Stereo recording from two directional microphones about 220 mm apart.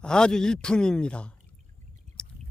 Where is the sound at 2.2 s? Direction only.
5° left (ahead or behind).